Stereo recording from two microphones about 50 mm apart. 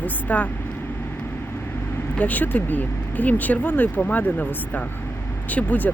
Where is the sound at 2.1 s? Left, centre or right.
Left.